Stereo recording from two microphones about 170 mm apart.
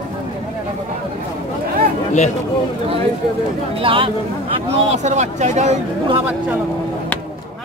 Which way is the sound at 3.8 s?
30° right (ahead or behind).